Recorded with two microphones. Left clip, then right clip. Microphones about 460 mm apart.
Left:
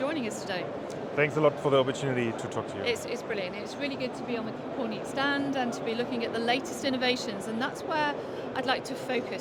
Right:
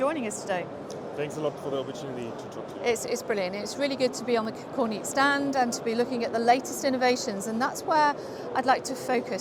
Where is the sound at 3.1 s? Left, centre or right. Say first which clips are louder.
Right 4 dB; right.